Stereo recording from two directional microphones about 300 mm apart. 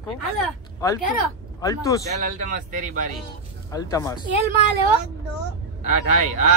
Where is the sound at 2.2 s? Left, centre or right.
Right.